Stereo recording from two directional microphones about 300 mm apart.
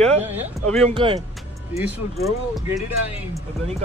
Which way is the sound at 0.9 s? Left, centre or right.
Centre.